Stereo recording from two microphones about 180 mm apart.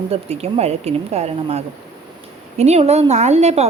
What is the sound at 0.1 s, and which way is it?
Speech, 35° right (ahead or behind).